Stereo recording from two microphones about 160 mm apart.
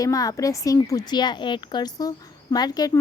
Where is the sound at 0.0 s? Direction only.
20° left (ahead or behind).